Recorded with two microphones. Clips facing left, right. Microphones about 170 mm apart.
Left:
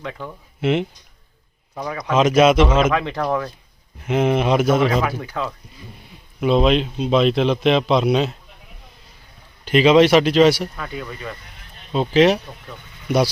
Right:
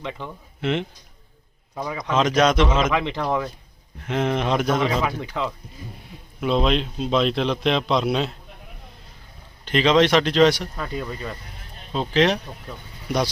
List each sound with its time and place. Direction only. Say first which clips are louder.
0.0 s speech: left 1 dB; 20° right (ahead or behind)
0.6 s speech: left 5 dB; 10° left (ahead or behind)
1.7 s speech: left 1 dB; 15° right (ahead or behind)
2.0 s speech: left 5 dB; 5° left (ahead or behind)
2.9 s speech: left 2 dB; 20° right (ahead or behind)
4.0 s speech: left 5 dB; 10° left (ahead or behind)
5.2 s speech: left 1 dB; 20° right (ahead or behind)
6.4 s a man's voice: left 5 dB; 5° left (ahead or behind)
9.6 s speech: left 5 dB; 10° left (ahead or behind)
10.8 s speech: right 1 dB; 30° right (ahead or behind)
11.9 s speech: left 5 dB; 5° left (ahead or behind)